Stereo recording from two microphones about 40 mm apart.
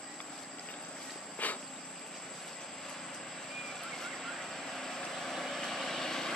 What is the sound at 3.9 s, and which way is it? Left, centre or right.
Vehicle, centre.